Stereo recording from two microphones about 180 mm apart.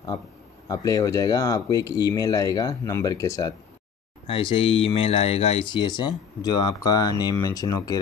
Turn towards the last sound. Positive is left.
turn(degrees=20)  # may be behind; listen again after turning